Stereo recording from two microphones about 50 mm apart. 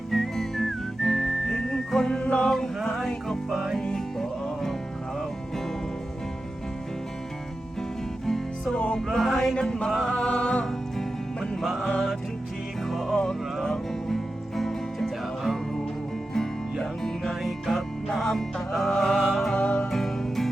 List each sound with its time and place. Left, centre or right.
0.1 s whistling: centre
2.8 s music: centre
3.8 s music: centre
8.7 s music: centre
9.0 s music: centre
9.6 s music: centre
10.2 s music: left
11.6 s music: centre
16.8 s music: centre
19.5 s music: left
19.9 s music: centre